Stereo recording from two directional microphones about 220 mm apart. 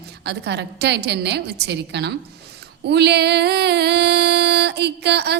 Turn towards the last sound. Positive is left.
turn(degrees=-50)  # may be behind; listen again after turning